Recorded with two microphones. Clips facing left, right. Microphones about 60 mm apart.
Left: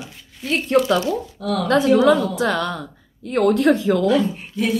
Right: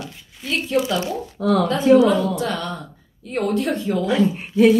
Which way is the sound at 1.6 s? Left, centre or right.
Left.